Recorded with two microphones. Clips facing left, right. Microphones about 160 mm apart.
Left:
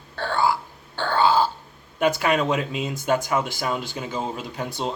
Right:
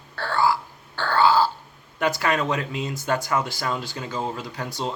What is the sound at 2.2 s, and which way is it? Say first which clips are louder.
Speech: left 2 dB; 20° left (ahead or behind).